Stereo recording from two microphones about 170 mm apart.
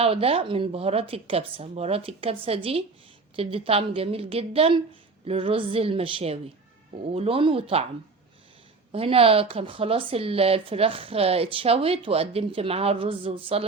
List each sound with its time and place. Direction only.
0.0 s speech: 35° right (ahead or behind)
8.9 s speech: 35° right (ahead or behind)